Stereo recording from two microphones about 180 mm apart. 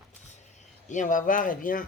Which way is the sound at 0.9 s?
45° left (ahead or behind).